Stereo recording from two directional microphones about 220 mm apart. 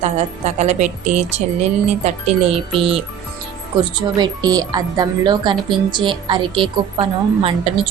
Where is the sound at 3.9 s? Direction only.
20° right (ahead or behind).